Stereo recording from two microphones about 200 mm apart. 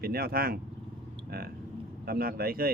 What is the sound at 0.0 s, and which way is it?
Speech, 50° right (ahead or behind).